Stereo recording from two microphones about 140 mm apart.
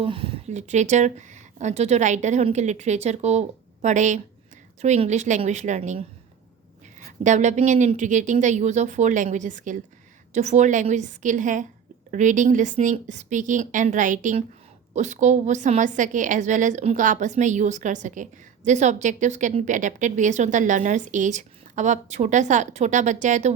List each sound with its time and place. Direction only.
0.0 s speech: 40° right (ahead or behind)
0.5 s a woman's voice: 55° right (ahead or behind)
7.3 s a woman's voice: 55° right (ahead or behind)